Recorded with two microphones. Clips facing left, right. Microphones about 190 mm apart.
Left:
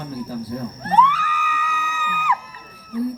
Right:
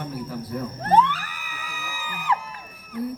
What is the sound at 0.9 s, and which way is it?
Music, 40° right (ahead or behind).